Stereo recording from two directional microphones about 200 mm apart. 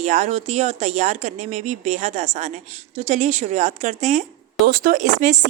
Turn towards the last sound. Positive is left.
turn(degrees=-40)  # may be behind; listen again after turning